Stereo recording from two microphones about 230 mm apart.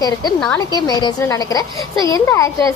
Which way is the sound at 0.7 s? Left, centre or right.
Centre.